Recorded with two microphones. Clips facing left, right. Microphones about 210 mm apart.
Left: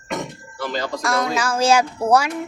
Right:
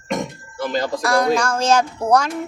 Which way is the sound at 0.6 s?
50° right (ahead or behind).